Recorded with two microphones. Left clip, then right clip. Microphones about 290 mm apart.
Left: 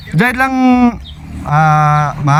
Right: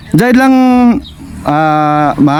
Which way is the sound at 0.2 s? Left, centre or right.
Right.